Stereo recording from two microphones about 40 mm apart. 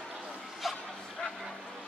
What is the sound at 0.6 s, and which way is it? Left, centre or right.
Bow-wow, centre.